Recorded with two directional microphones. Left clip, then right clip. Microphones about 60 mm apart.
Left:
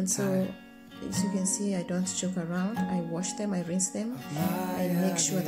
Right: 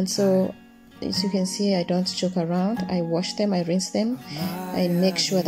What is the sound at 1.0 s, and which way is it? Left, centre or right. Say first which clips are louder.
Speech: right 7 dB; centre.